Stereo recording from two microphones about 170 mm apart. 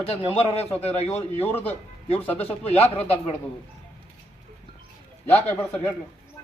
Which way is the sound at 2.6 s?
35° left (ahead or behind).